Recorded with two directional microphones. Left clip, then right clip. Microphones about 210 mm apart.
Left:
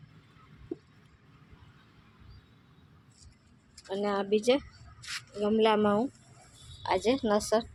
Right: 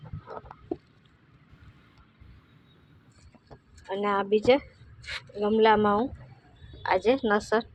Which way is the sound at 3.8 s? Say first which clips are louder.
Right 4 dB; 10° left (ahead or behind).